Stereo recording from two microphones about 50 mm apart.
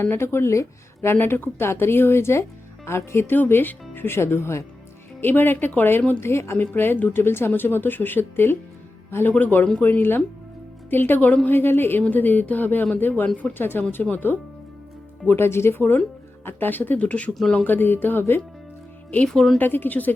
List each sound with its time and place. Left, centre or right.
0.0 s speech: left
1.0 s speech: left
3.3 s speech: left
5.2 s speech: left
6.1 s speech: left
6.6 s speech: left
13.2 s speech: left
13.5 s speech: left
14.0 s speech: left
15.3 s speech: left
17.7 s speech: left
19.2 s speech: centre
19.5 s speech: left